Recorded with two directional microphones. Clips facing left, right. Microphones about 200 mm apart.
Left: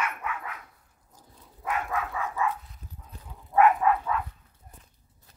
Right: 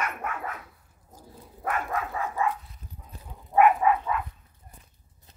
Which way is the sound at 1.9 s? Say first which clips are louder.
Right 1 dB; 40° right (ahead or behind).